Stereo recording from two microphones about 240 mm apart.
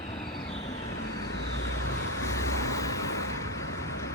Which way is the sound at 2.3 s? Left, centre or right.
Centre.